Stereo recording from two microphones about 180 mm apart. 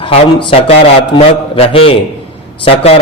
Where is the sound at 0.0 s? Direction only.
30° left (ahead or behind).